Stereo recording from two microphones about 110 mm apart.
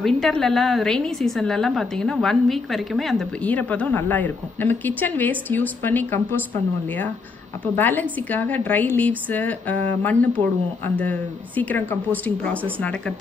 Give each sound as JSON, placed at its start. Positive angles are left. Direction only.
{"t": 0.0, "sound": "a woman's voice", "side_deg": 5}
{"t": 3.4, "sound": "a woman's voice", "side_deg": 15}
{"t": 7.6, "sound": "a woman's voice", "side_deg": 15}